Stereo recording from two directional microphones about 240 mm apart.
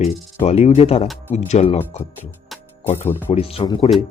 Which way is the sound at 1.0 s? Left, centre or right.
Centre.